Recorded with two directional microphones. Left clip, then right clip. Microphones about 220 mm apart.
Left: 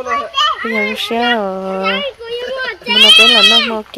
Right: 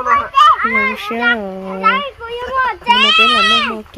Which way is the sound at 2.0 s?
40° right (ahead or behind).